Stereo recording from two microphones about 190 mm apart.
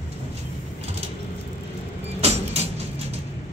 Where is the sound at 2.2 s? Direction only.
35° right (ahead or behind).